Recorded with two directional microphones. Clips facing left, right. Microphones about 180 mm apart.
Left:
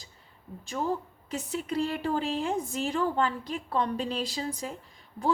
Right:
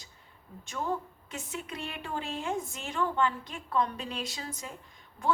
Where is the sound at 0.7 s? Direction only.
35° left (ahead or behind).